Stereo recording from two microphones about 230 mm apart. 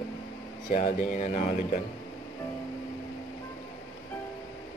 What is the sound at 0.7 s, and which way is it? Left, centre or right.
Speech, left.